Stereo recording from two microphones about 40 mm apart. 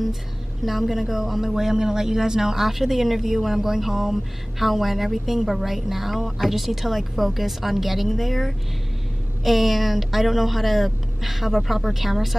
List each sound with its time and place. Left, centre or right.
0.7 s a man's voice: centre